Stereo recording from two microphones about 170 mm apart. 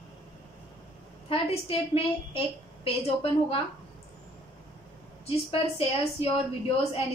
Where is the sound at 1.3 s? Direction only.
35° left (ahead or behind).